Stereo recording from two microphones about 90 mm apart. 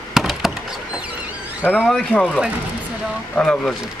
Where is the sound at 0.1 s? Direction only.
5° right (ahead or behind).